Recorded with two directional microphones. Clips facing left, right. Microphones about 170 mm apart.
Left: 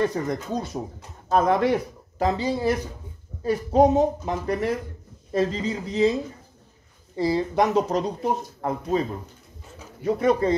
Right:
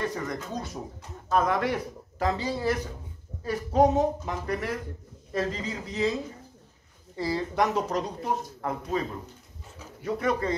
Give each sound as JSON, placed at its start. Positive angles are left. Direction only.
{"t": 0.0, "sound": "speech", "side_deg": 30}
{"t": 7.2, "sound": "speech", "side_deg": 20}
{"t": 10.0, "sound": "speech", "side_deg": 25}